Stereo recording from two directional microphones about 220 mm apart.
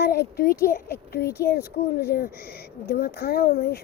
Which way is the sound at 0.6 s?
40° left (ahead or behind).